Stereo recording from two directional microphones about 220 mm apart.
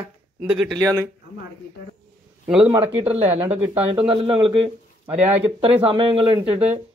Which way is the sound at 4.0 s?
25° right (ahead or behind).